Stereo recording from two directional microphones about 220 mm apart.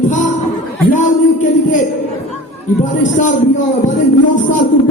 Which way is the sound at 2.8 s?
35° left (ahead or behind).